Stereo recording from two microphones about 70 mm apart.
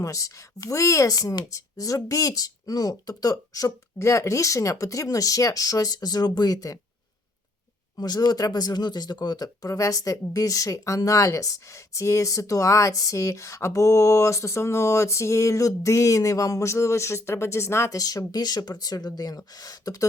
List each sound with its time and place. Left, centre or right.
0.0 s speech: left
3.9 s speech: left
7.9 s speech: left
17.9 s speech: left